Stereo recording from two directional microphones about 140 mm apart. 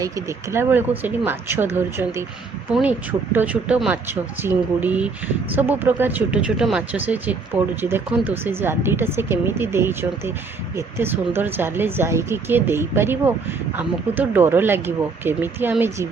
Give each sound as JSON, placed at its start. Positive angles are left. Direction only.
{"t": 0.0, "sound": "speech", "side_deg": -20}